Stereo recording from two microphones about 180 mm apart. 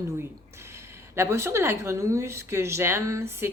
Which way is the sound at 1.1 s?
15° right (ahead or behind).